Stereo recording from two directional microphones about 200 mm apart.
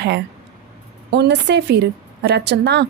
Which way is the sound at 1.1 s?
60° right (ahead or behind).